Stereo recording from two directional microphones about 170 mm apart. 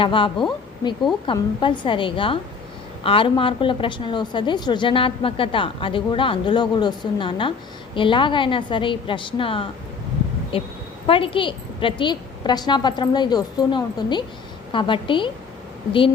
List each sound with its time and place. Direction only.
0.0 s a woman's voice: 30° left (ahead or behind)
1.3 s a woman's voice: 30° left (ahead or behind)